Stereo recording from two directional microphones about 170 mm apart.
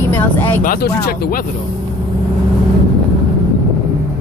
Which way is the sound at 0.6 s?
60° left (ahead or behind).